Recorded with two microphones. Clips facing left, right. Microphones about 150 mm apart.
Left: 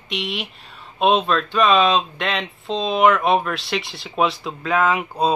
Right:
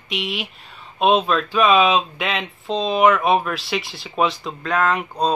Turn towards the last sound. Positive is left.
turn(degrees=5)  # may be behind; listen again after turning